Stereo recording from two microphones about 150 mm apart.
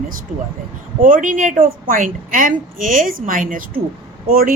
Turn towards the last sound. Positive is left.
turn(degrees=-70)  # may be behind; listen again after turning